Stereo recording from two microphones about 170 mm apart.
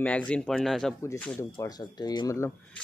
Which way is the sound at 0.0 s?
5° left (ahead or behind).